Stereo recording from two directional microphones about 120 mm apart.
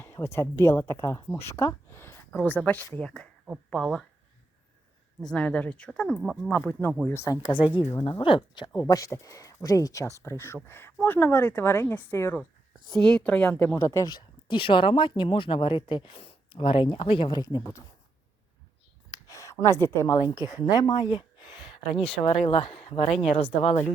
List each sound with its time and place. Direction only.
0.0 s a woman's voice: 20° left (ahead or behind)
5.2 s speech: 10° left (ahead or behind)
6.5 s a woman's voice: 15° left (ahead or behind)
8.2 s speech: 45° left (ahead or behind)
8.9 s a woman's voice: 30° left (ahead or behind)
12.9 s speech: 10° left (ahead or behind); by 17.4 s 45° left (ahead or behind)
17.4 s a woman's voice: 30° left (ahead or behind)
19.1 s speech: 25° left (ahead or behind); by 23.8 s 60° left (ahead or behind)